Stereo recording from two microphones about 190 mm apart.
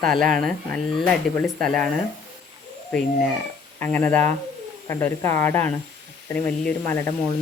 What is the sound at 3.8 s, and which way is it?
Speech, 10° left (ahead or behind).